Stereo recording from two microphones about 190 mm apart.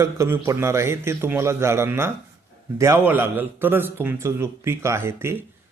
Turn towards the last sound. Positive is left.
turn(degrees=-10)  # may be behind; listen again after turning